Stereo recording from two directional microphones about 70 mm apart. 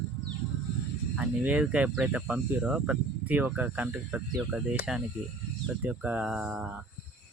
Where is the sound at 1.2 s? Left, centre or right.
Centre.